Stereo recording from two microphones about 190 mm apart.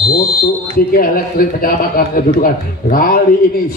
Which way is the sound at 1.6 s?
50° left (ahead or behind).